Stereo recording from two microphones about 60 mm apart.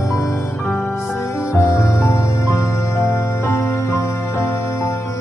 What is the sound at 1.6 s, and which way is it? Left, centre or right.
Music, left.